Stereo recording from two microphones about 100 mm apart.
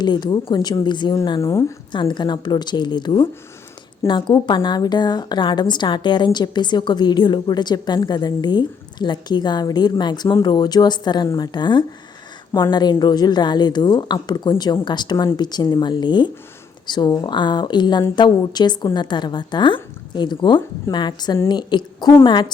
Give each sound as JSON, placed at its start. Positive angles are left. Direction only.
{"t": 0.0, "sound": "a woman's voice", "side_deg": 45}
{"t": 1.4, "sound": "speech", "side_deg": 30}
{"t": 1.9, "sound": "a woman's voice", "side_deg": 50}